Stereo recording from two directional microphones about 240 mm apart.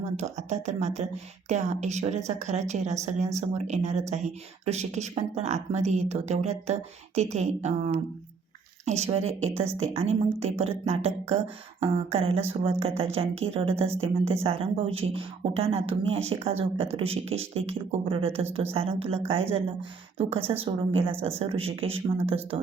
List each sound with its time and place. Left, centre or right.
0.0 s a woman's voice: right